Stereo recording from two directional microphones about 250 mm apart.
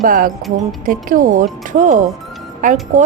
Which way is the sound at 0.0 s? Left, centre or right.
Right.